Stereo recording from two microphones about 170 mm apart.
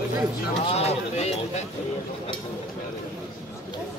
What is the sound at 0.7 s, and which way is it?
Speech, 40° left (ahead or behind).